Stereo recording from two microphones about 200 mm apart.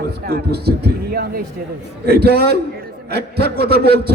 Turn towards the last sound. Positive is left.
turn(degrees=-50)  # may be behind; listen again after turning